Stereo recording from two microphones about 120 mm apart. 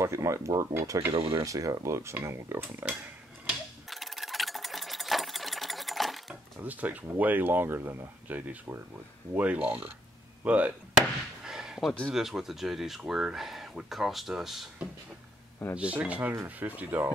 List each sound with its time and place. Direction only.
0.0 s speech: 25° right (ahead or behind)
3.4 s sewing machine: centre (ahead or behind)
6.6 s speech: 15° right (ahead or behind)
11.4 s a sound: 5° right (ahead or behind)
12.1 s speech: 5° right (ahead or behind)